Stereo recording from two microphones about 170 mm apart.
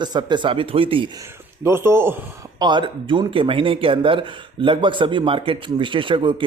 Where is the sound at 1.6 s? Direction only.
15° right (ahead or behind).